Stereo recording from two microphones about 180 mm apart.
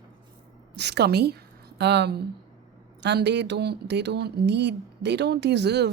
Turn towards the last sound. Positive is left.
turn(degrees=-70)  # may be behind; listen again after turning